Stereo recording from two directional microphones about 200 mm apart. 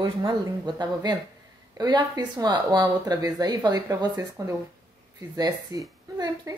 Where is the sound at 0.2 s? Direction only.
20° right (ahead or behind).